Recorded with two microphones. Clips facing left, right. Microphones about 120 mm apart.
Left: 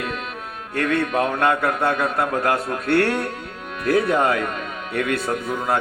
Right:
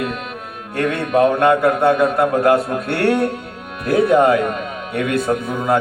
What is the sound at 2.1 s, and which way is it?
A man's voice, 15° right (ahead or behind).